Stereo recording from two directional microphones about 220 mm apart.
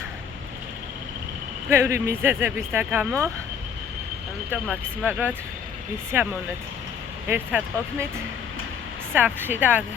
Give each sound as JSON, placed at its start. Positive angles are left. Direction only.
{"t": 1.7, "sound": "speech", "side_deg": -10}
{"t": 5.0, "sound": "speech", "side_deg": -10}
{"t": 9.1, "sound": "speech", "side_deg": -10}